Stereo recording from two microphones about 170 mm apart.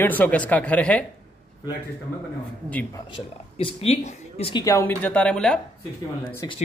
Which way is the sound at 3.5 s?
35° left (ahead or behind).